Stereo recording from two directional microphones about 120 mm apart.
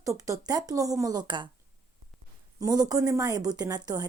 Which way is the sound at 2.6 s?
35° right (ahead or behind).